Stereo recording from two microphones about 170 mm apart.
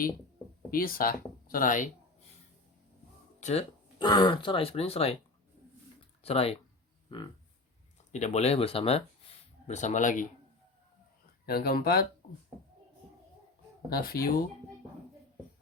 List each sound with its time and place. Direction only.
0.7 s speech: 60° left (ahead or behind)
3.4 s a sound: 35° left (ahead or behind)
4.0 s speech: 25° left (ahead or behind)
6.2 s speech: 35° left (ahead or behind)
8.1 s speech: 40° left (ahead or behind)
11.4 s speech: 65° left (ahead or behind)
13.9 s speech: 60° left (ahead or behind)